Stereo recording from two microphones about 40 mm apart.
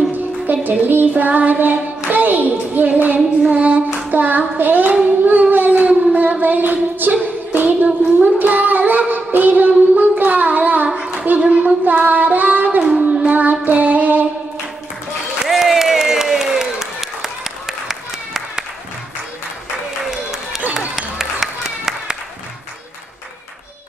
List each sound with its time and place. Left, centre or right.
0.1 s music: right
2.0 s hands: right
3.2 s a sound: right
4.1 s hands: right
5.0 s a sound: right
6.4 s child singing: right
11.3 s hands: right
11.6 s child singing: right
15.4 s applause: centre
20.1 s a sound: centre